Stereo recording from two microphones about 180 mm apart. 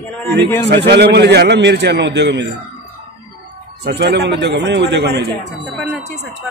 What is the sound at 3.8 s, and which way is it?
A man's voice, 65° right (ahead or behind).